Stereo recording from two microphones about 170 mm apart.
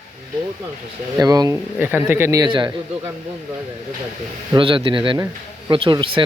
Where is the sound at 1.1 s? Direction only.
20° right (ahead or behind).